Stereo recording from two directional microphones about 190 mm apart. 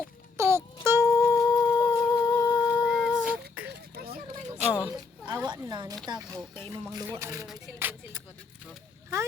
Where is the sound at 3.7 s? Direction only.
55° right (ahead or behind).